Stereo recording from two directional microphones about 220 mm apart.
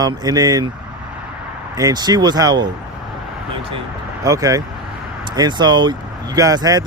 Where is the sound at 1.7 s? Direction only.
15° right (ahead or behind).